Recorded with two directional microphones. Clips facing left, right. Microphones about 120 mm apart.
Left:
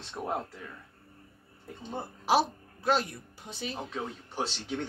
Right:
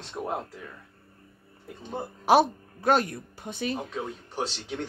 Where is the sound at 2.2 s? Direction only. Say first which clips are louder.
Right 6 dB; 55° right (ahead or behind).